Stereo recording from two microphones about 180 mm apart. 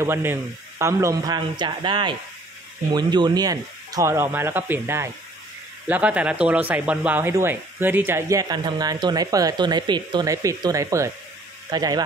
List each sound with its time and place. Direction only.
0.0 s speech: 15° right (ahead or behind)